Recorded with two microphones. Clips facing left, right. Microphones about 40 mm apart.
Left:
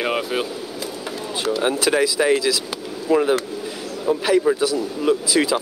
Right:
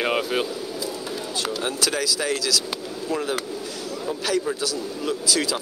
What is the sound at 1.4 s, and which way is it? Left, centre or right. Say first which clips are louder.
Speech: left 7 dB; centre.